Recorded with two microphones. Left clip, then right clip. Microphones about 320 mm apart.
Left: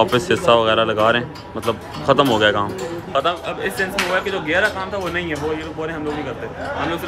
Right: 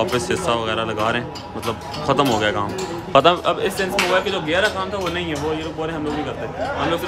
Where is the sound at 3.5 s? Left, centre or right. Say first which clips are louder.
Right 2 dB; centre.